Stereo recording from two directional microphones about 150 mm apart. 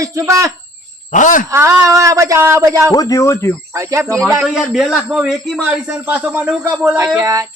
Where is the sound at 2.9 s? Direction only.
25° left (ahead or behind).